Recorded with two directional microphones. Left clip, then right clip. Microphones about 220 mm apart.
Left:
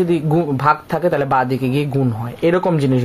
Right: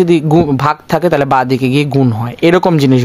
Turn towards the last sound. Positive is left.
turn(degrees=-50)  # may be behind; listen again after turning